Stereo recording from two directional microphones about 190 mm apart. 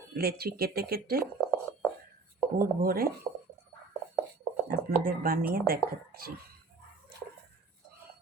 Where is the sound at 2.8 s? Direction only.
50° right (ahead or behind).